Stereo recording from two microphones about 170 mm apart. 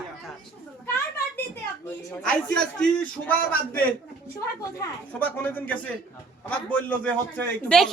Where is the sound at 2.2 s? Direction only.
5° left (ahead or behind).